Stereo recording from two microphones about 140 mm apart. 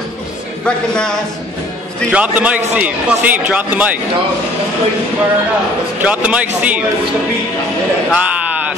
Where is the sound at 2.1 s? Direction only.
10° right (ahead or behind).